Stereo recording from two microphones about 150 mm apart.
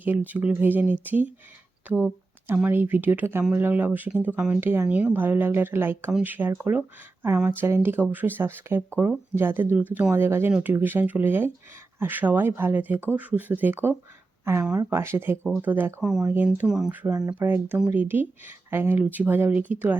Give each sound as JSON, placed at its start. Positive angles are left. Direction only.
{"t": 0.0, "sound": "speech", "side_deg": -10}